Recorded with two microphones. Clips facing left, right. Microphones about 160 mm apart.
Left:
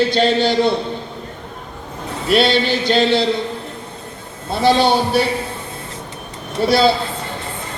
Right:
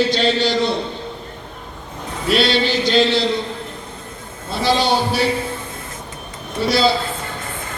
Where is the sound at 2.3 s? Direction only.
55° left (ahead or behind).